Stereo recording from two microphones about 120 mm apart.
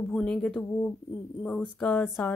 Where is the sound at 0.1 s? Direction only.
5° left (ahead or behind).